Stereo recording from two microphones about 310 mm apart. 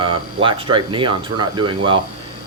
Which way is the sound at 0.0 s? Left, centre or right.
Centre.